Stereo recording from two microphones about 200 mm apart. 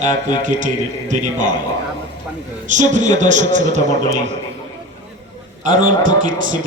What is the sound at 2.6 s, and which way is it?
A man's voice, 40° right (ahead or behind).